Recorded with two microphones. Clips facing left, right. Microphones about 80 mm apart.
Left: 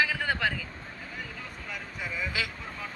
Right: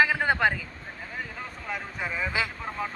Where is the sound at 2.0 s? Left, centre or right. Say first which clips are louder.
Right 4 dB; right.